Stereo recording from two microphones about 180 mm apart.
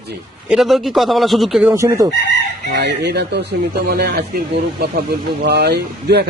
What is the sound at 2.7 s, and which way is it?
A man's voice, 70° right (ahead or behind).